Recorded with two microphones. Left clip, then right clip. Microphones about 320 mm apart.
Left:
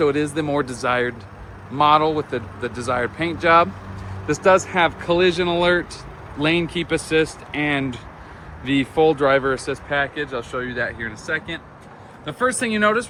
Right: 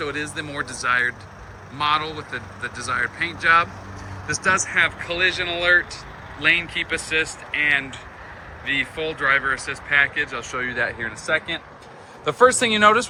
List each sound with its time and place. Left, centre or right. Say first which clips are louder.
0.0 s speech: left 7 dB; centre